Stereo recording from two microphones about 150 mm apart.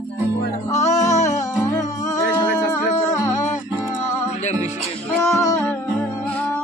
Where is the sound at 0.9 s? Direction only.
50° left (ahead or behind).